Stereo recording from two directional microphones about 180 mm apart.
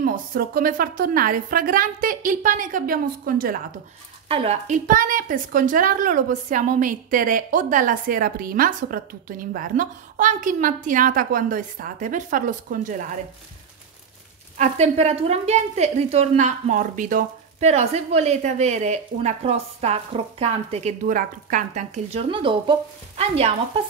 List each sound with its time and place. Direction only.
0.0 s a woman's voice: 50° right (ahead or behind)
4.3 s a woman's voice: 35° right (ahead or behind)
14.6 s a woman's voice: 35° right (ahead or behind)